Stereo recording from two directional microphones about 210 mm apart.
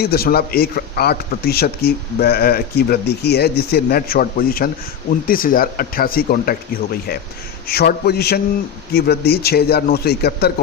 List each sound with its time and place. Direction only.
0.0 s speech: 45° left (ahead or behind)
7.7 s speech: 50° left (ahead or behind)